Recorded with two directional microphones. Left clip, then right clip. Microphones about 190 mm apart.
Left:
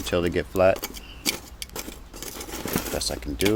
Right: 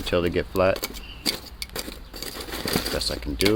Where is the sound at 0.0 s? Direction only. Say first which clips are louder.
Right 1 dB; 10° left (ahead or behind).